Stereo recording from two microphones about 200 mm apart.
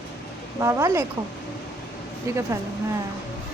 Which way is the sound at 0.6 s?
15° right (ahead or behind).